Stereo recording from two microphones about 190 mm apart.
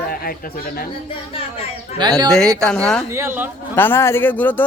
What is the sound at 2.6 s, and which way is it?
Speech, 5° left (ahead or behind).